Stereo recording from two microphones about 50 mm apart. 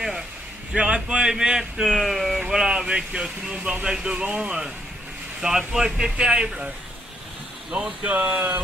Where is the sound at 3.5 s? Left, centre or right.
Right.